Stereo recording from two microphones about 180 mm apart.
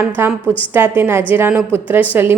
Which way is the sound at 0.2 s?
10° right (ahead or behind).